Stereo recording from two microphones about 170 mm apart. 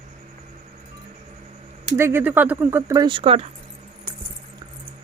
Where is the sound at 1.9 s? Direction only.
15° right (ahead or behind); by 3.5 s 35° right (ahead or behind).